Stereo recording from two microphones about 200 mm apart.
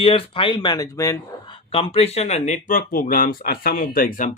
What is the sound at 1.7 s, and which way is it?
Speech, 30° left (ahead or behind).